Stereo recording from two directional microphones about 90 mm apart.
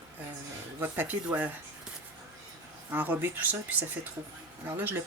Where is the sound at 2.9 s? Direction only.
20° right (ahead or behind).